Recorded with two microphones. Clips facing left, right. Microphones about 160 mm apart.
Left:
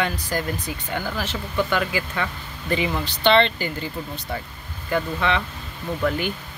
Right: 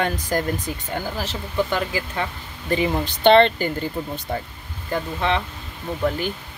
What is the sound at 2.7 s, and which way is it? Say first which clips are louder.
Speech: right 4 dB; 45° right (ahead or behind).